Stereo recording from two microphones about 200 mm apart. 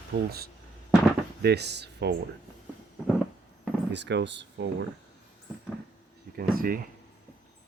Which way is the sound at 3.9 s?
60° right (ahead or behind).